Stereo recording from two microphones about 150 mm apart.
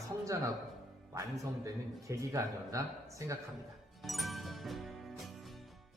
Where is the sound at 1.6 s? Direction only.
20° right (ahead or behind).